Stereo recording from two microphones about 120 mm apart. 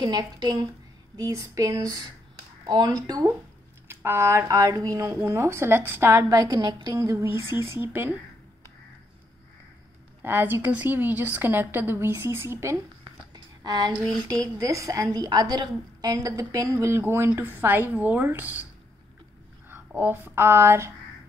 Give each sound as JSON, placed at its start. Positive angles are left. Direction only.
{"t": 0.0, "sound": "a woman's voice", "side_deg": -35}
{"t": 10.2, "sound": "a woman's voice", "side_deg": -20}
{"t": 13.3, "sound": "a sound", "side_deg": -35}
{"t": 14.1, "sound": "a woman's voice", "side_deg": -30}
{"t": 20.0, "sound": "a woman's voice", "side_deg": -20}